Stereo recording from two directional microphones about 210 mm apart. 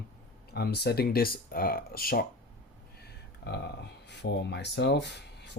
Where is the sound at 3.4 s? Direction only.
50° left (ahead or behind).